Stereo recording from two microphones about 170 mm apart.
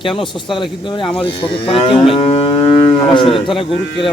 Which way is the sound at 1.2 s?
30° left (ahead or behind).